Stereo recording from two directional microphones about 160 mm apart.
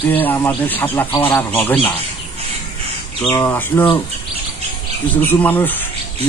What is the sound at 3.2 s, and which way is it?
Speech, 10° left (ahead or behind).